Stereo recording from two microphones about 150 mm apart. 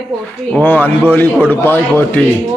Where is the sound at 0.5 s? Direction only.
10° left (ahead or behind).